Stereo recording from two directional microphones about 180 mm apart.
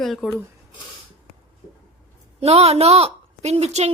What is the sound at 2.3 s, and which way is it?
A woman's voice, 35° right (ahead or behind).